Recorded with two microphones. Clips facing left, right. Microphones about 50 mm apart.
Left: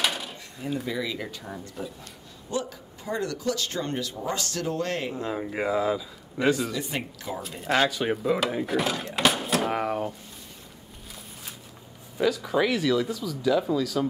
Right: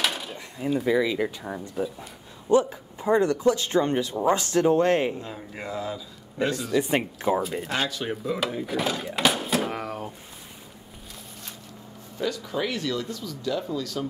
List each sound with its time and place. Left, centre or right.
0.0 s a sound: centre
0.8 s speech: centre
5.1 s speech: left
5.7 s speech: centre
6.8 s speech: right
7.6 s speech: centre
9.7 s speech: centre
12.2 s speech: centre